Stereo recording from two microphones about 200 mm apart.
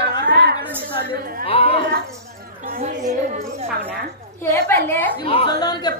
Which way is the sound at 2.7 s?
40° right (ahead or behind).